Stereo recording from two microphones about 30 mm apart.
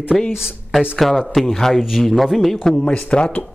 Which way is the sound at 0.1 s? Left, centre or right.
Centre.